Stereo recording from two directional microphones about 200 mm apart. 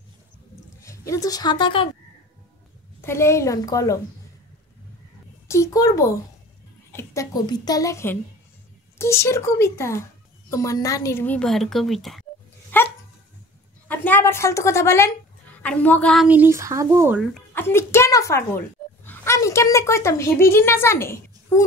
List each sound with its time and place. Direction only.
0.7 s speech: 15° left (ahead or behind)
3.0 s speech: 15° left (ahead or behind)
5.5 s a woman's voice: 15° left (ahead or behind)
12.7 s dog: 10° left (ahead or behind)
13.8 s a woman's voice: 10° left (ahead or behind)
16.3 s speech: 10° right (ahead or behind)
17.6 s a woman's voice: 10° left (ahead or behind)